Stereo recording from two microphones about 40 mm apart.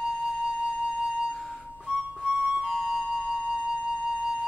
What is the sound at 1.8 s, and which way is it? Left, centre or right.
Music, centre.